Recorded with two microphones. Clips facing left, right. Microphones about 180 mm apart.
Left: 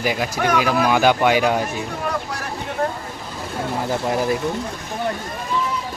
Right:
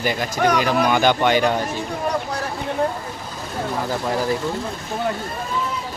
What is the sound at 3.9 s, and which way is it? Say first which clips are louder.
Speech: left 2 dB; 20° left (ahead or behind).